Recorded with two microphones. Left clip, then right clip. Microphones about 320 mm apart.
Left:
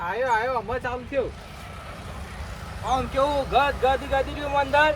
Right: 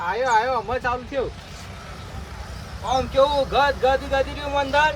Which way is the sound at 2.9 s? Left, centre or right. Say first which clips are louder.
Right 4 dB; centre.